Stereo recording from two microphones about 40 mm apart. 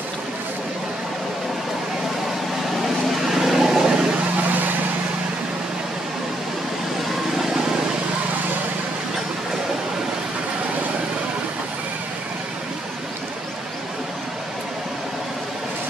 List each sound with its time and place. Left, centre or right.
3.3 s vehicle: centre
3.9 s vehicle: right